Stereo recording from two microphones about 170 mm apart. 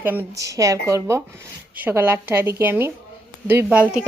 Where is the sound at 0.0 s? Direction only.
10° right (ahead or behind).